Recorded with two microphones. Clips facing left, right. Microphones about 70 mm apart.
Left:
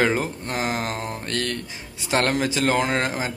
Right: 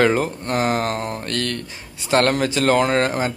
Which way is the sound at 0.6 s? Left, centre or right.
Right.